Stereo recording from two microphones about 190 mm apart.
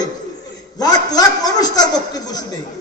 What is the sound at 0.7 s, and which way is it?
A man's voice, 20° left (ahead or behind).